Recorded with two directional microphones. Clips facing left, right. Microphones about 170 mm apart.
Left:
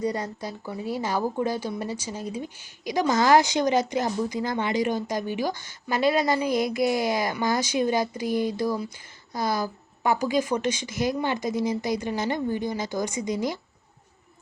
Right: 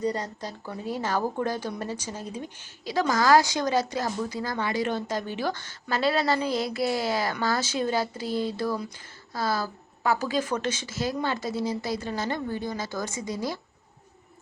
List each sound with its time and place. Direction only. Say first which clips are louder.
0.0 s a woman's voice: left 1 dB; 10° left (ahead or behind)